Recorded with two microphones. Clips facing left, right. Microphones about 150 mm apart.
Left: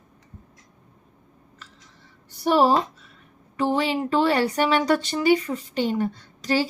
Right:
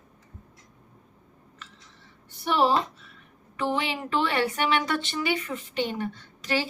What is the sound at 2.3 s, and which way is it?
A woman's voice, 40° left (ahead or behind).